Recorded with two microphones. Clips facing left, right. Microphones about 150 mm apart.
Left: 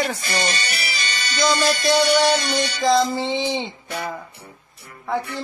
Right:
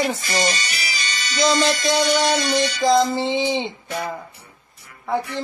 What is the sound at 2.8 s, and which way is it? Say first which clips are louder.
Speech: right 1 dB; 20° right (ahead or behind).